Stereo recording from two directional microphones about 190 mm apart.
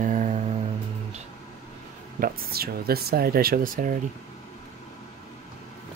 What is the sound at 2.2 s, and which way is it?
Speech, 55° right (ahead or behind).